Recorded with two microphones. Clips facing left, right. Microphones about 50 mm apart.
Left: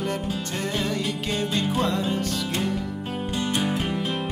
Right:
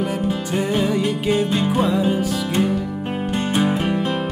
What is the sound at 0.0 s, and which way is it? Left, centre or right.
Music, centre.